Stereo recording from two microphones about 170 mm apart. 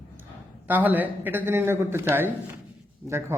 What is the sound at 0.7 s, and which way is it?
A man's voice, 10° right (ahead or behind).